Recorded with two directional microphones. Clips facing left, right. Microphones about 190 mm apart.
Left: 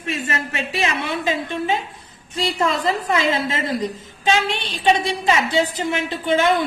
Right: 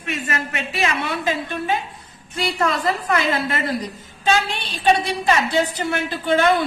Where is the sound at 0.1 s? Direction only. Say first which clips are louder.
Left 1 dB; 30° left (ahead or behind).